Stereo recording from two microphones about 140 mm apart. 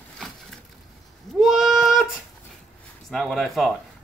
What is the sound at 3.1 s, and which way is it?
Speech, centre (ahead or behind).